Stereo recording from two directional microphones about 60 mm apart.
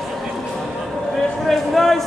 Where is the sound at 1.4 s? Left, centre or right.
Centre.